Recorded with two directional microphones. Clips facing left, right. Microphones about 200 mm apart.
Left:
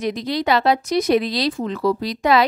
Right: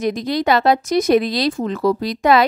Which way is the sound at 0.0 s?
45° right (ahead or behind).